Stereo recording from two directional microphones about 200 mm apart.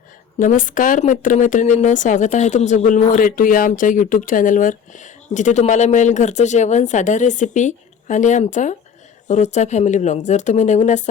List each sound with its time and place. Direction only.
0.3 s speech: 40° left (ahead or behind)